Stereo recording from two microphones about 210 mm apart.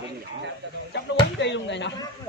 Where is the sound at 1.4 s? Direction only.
55° left (ahead or behind).